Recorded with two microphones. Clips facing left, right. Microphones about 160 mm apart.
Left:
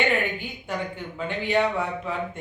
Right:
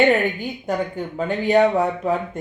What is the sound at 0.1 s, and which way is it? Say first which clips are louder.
Speech: right 7 dB; 40° right (ahead or behind).